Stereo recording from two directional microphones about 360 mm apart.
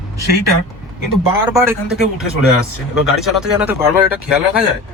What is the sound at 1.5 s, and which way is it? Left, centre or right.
Speech, centre.